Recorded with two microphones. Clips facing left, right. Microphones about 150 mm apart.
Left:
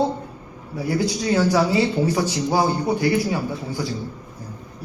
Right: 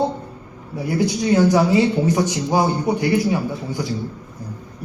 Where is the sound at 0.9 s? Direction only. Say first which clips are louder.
Right 3 dB; 20° right (ahead or behind).